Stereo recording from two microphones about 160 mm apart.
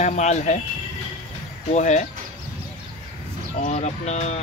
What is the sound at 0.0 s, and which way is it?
Speech, 45° left (ahead or behind).